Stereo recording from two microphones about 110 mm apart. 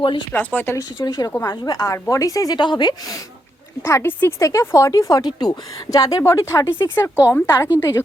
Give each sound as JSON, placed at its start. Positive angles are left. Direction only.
{"t": 0.0, "sound": "speech", "side_deg": 50}
{"t": 0.3, "sound": "speech", "side_deg": 20}
{"t": 0.8, "sound": "a woman's voice", "side_deg": 35}
{"t": 1.3, "sound": "a woman's voice", "side_deg": 25}
{"t": 3.8, "sound": "speech", "side_deg": 20}